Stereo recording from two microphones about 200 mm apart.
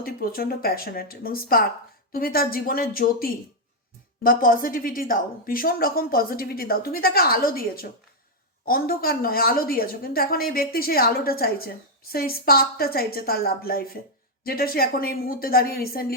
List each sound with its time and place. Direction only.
0.0 s a woman's voice: 45° left (ahead or behind)